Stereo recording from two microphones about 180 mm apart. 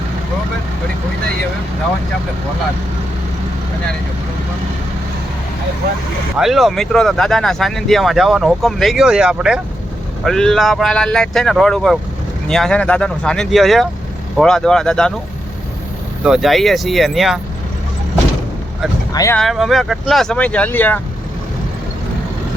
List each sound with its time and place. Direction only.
6.3 s speech: centre (ahead or behind)
16.2 s speech: centre (ahead or behind)
19.1 s speech: 15° left (ahead or behind)
19.4 s speech: centre (ahead or behind)